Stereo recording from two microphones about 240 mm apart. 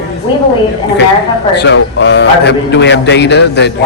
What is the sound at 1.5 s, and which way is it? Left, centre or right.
A man's voice, left.